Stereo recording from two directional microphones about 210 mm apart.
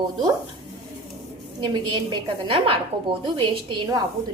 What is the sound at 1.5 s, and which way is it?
A woman's voice, 20° right (ahead or behind).